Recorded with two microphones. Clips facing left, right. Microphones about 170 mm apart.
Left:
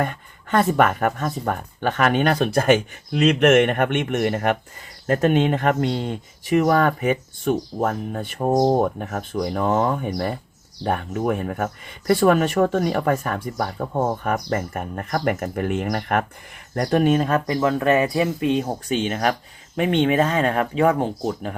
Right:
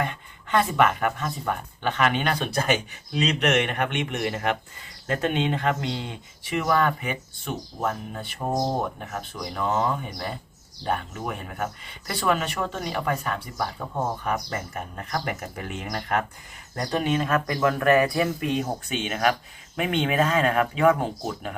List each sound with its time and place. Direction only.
0.0 s speech: 45° left (ahead or behind)
17.2 s speech: 30° left (ahead or behind)